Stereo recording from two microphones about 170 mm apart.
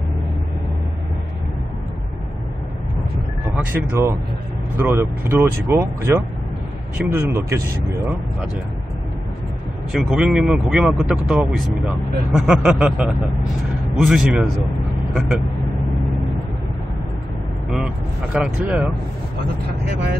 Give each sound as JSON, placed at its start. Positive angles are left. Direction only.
{"t": 3.7, "sound": "speech", "side_deg": -15}
{"t": 9.9, "sound": "speech", "side_deg": -5}
{"t": 17.6, "sound": "speech", "side_deg": -5}